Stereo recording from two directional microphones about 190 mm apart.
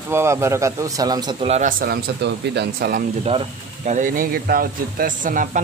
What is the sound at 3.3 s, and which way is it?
Speech, 35° right (ahead or behind).